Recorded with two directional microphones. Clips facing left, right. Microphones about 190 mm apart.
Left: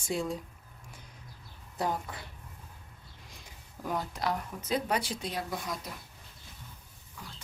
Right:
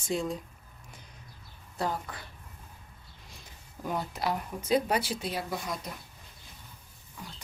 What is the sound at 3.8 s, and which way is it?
Speech, 5° right (ahead or behind).